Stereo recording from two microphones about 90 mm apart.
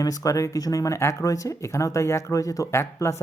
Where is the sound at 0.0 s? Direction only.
40° left (ahead or behind).